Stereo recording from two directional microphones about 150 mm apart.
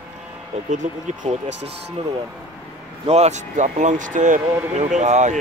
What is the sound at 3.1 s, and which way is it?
Speech, 50° right (ahead or behind).